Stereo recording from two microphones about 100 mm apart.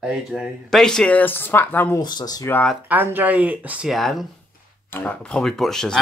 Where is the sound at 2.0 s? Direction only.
45° left (ahead or behind).